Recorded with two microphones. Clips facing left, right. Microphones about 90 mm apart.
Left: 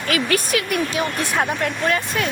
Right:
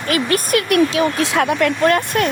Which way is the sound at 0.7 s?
90° right.